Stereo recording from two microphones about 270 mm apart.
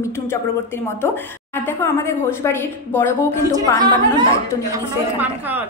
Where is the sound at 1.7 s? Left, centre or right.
Centre.